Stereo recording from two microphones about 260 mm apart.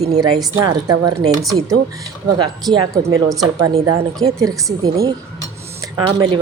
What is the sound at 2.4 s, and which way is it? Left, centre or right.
Speech, centre.